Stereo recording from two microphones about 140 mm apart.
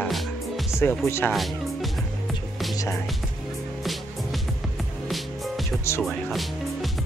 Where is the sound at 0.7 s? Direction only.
20° left (ahead or behind).